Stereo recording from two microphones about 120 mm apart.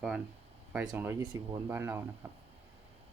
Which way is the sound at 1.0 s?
20° right (ahead or behind).